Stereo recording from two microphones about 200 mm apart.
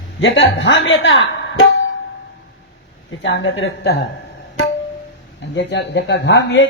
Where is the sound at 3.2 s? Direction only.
70° left (ahead or behind).